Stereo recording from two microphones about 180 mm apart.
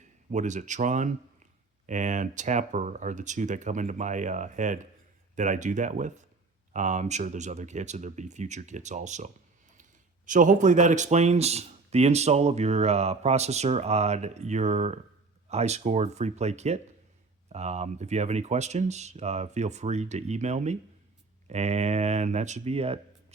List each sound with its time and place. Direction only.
0.3 s speech: 40° right (ahead or behind)